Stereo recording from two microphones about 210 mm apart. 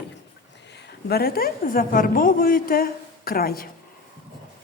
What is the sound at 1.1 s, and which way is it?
A woman's voice, 45° left (ahead or behind).